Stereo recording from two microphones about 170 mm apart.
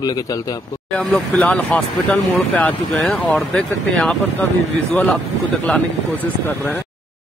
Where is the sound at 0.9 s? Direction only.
5° left (ahead or behind).